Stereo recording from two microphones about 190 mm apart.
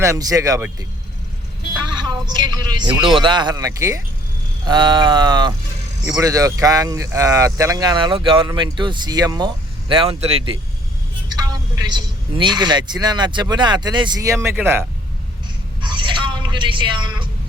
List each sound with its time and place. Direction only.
0.0 s speech: 15° right (ahead or behind)
2.0 s speech: 20° right (ahead or behind)
15.8 s a sound: 25° right (ahead or behind)